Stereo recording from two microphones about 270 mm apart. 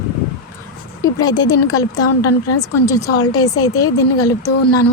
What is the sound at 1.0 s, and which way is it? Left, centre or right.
Speech, centre.